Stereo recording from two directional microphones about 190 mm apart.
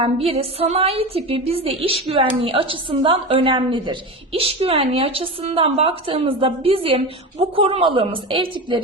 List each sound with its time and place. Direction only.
0.0 s a woman's voice: 30° right (ahead or behind)